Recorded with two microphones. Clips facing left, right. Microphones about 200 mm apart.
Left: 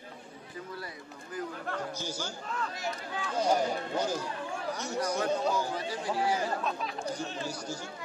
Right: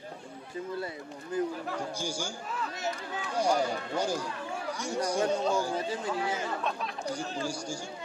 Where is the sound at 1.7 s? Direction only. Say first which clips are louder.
Right 1 dB; 10° right (ahead or behind).